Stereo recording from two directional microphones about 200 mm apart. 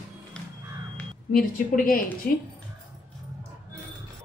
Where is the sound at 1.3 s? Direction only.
45° left (ahead or behind).